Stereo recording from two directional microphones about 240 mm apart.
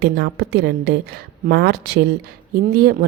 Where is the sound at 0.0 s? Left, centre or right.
Right.